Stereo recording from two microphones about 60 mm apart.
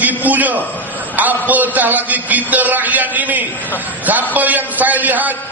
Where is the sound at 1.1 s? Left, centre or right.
Right.